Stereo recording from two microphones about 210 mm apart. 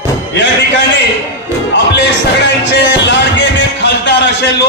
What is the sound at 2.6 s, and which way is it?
Music, 55° left (ahead or behind).